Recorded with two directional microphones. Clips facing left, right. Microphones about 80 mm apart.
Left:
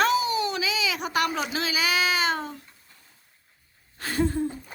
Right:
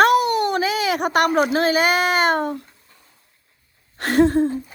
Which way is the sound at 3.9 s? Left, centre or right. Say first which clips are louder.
Right 10 dB; right.